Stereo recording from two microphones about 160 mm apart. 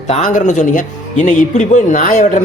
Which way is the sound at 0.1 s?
50° left (ahead or behind).